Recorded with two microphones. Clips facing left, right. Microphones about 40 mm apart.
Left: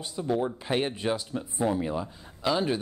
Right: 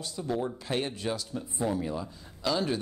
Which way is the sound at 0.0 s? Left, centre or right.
Centre.